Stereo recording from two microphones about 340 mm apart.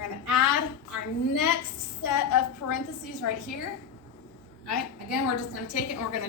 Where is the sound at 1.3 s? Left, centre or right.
Left.